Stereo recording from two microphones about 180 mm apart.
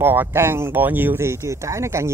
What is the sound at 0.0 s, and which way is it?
Speech, 10° right (ahead or behind).